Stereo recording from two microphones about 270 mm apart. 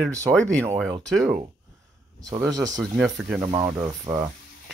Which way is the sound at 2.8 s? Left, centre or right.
Centre.